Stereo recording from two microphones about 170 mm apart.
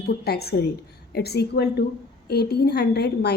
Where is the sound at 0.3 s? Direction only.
70° left (ahead or behind).